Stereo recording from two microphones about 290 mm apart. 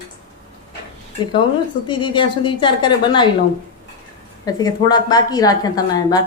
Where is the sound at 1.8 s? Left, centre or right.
Centre.